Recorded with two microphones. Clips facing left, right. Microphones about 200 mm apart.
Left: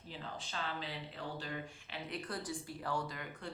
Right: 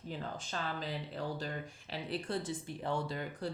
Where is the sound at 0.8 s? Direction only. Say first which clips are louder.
Right 5 dB; 40° right (ahead or behind).